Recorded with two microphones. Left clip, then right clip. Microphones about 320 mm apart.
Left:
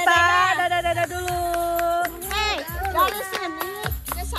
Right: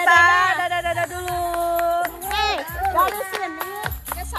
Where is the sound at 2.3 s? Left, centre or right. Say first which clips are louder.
Right 3 dB; centre.